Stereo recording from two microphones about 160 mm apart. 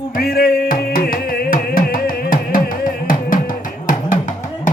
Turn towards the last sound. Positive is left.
turn(degrees=55)  # may be behind; listen again after turning